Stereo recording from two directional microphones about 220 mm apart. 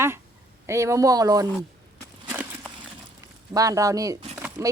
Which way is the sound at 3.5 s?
15° right (ahead or behind).